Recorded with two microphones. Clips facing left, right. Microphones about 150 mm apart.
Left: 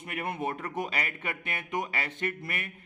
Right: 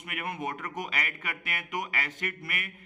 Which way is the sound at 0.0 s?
30° left (ahead or behind).